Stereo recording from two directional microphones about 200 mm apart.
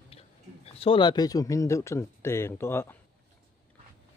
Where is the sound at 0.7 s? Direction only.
30° left (ahead or behind); by 3.0 s 10° left (ahead or behind).